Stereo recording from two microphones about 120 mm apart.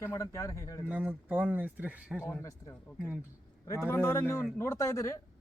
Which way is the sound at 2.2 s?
25° left (ahead or behind).